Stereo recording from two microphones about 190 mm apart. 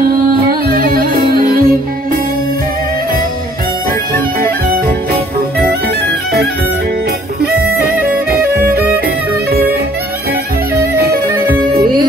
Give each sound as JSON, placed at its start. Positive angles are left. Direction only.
{"t": 0.5, "sound": "music", "side_deg": -50}